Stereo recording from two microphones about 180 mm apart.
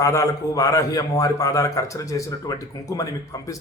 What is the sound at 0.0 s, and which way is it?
A man's voice, 15° left (ahead or behind).